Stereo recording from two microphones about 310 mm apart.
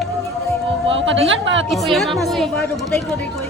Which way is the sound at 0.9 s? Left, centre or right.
Right.